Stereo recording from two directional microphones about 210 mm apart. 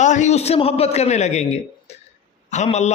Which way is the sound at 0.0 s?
35° left (ahead or behind).